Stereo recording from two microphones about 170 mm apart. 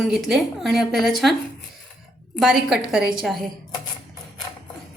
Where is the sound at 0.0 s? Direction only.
5° right (ahead or behind).